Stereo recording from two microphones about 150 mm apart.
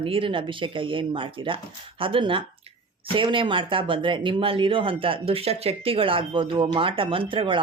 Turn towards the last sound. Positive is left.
turn(degrees=-35)  # may be behind; listen again after turning